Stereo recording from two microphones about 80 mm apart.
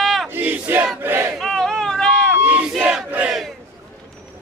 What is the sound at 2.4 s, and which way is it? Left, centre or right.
Battle cry, centre.